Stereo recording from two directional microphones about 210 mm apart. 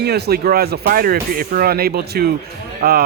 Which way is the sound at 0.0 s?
50° right (ahead or behind).